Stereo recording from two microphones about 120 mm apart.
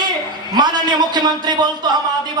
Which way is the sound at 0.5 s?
35° right (ahead or behind).